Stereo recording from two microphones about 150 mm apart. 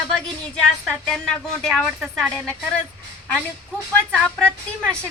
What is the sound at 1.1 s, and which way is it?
Speech, centre (ahead or behind).